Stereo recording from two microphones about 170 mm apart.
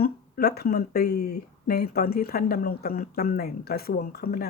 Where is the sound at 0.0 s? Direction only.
65° left (ahead or behind).